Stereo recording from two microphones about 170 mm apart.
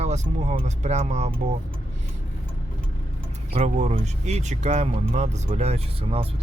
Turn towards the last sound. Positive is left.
turn(degrees=-35)  # may be behind; listen again after turning